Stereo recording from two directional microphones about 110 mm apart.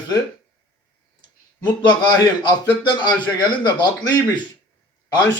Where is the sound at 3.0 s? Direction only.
40° left (ahead or behind).